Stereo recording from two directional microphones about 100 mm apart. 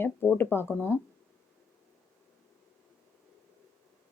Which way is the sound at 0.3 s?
20° left (ahead or behind).